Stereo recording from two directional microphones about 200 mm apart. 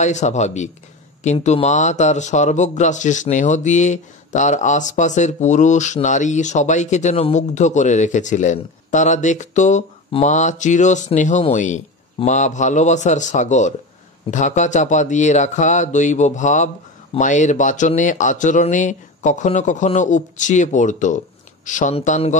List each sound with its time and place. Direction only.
0.0 s speech: 35° left (ahead or behind)